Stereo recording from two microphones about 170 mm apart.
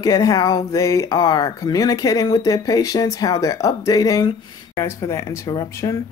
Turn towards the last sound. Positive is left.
turn(degrees=20)  # may be behind; listen again after turning